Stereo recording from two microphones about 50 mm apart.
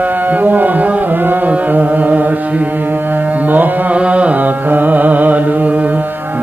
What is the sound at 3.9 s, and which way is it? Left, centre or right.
Carnatic music, right.